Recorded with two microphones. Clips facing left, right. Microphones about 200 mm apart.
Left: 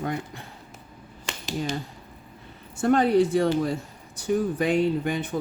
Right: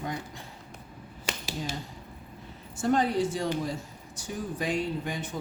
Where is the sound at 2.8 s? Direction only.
60° left (ahead or behind).